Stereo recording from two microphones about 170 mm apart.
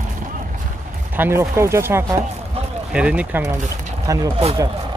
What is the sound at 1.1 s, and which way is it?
Speech, 15° right (ahead or behind).